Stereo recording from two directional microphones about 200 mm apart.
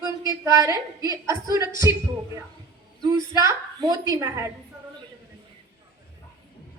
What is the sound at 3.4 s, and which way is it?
A woman's voice, 15° right (ahead or behind).